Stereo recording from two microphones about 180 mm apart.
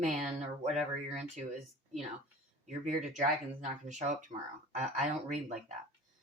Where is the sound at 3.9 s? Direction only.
40° right (ahead or behind).